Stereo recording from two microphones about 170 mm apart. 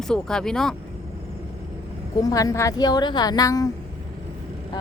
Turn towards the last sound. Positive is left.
turn(degrees=20)  # may be behind; listen again after turning